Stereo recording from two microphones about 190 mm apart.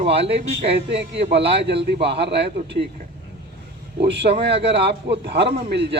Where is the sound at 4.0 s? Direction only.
60° right (ahead or behind).